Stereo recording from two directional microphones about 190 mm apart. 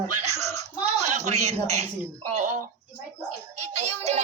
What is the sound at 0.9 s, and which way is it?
Speech, 35° right (ahead or behind).